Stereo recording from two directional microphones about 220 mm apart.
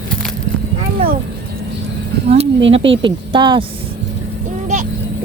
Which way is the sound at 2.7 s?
25° right (ahead or behind).